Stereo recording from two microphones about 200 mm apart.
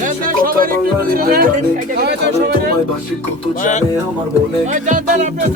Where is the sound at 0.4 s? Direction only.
45° right (ahead or behind).